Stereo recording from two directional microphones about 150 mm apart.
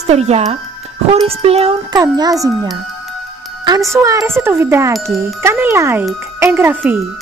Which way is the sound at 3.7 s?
20° right (ahead or behind).